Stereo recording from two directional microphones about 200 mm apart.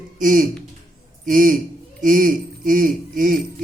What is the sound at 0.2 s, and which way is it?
Mantra, 40° right (ahead or behind).